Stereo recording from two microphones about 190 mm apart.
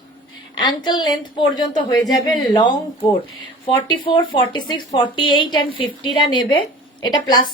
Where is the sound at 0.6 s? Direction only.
25° left (ahead or behind).